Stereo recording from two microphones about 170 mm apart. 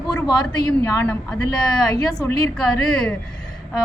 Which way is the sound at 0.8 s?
15° left (ahead or behind).